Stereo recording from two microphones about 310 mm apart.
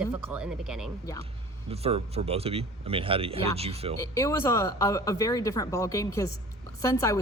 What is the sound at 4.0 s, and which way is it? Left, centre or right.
Speech, centre.